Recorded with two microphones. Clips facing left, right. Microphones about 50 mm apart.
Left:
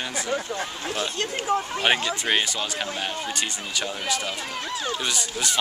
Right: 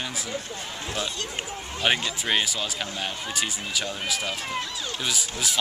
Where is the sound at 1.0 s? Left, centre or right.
Left.